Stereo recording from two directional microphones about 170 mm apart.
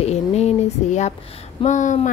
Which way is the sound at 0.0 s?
40° left (ahead or behind).